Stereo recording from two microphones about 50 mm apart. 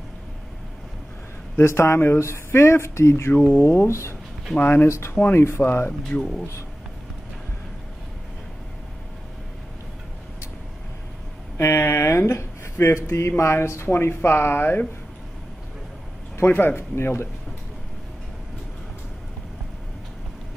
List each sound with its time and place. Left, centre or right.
1.6 s speech: left
4.6 s speech: left
4.8 s speech: left
5.6 s speech: left
11.5 s speech: left
16.4 s speech: left